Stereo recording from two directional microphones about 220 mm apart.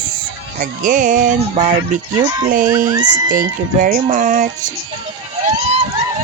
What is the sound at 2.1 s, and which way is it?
Speech, 15° right (ahead or behind).